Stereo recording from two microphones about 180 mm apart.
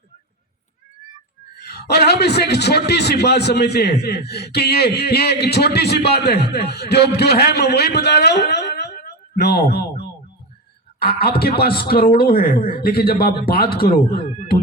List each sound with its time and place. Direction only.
1.5 s a man's voice: 65° left (ahead or behind)